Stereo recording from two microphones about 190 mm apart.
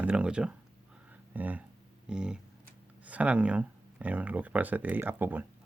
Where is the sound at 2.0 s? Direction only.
5° right (ahead or behind).